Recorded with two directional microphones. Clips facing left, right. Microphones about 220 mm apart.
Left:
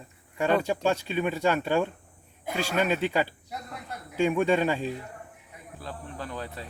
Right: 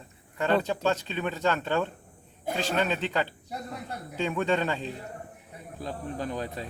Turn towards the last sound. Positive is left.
turn(degrees=-15)  # may be behind; listen again after turning